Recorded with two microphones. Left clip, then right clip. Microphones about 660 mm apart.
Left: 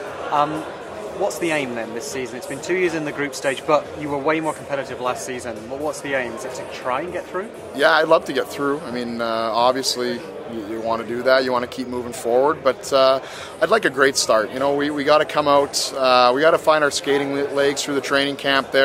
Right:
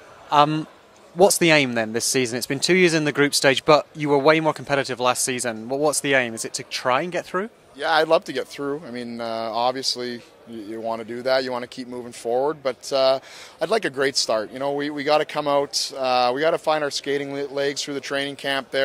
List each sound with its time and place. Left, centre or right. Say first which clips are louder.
1.2 s speech: right 6 dB; right
7.8 s speech: left 4 dB; right